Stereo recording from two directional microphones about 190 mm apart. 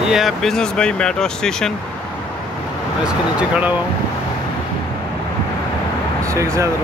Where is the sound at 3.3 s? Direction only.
5° right (ahead or behind).